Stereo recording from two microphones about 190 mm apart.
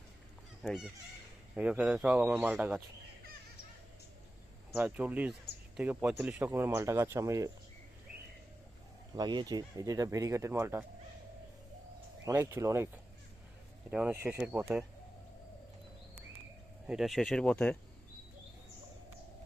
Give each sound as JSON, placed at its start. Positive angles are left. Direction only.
{"t": 0.6, "sound": "speech", "side_deg": 0}
{"t": 4.7, "sound": "speech", "side_deg": -5}
{"t": 9.1, "sound": "speech", "side_deg": -20}
{"t": 12.2, "sound": "speech", "side_deg": -15}
{"t": 16.8, "sound": "speech", "side_deg": 0}